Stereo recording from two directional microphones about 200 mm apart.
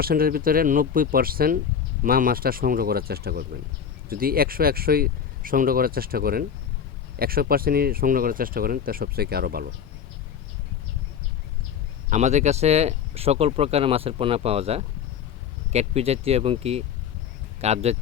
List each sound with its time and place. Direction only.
0.0 s speech: 45° right (ahead or behind)
12.1 s speech: 35° right (ahead or behind)